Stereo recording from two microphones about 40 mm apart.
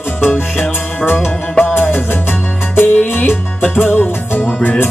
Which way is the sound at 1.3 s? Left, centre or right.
Left.